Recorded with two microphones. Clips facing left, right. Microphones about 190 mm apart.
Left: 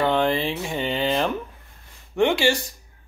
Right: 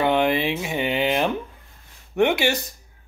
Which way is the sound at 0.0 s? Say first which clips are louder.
Right 1 dB; 10° right (ahead or behind).